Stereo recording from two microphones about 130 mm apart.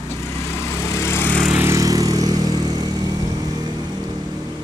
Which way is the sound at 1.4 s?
15° right (ahead or behind).